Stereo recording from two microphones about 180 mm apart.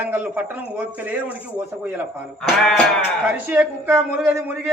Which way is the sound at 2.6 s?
Centre (ahead or behind).